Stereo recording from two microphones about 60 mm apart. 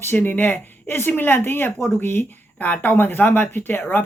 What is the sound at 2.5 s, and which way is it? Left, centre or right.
Speech, left.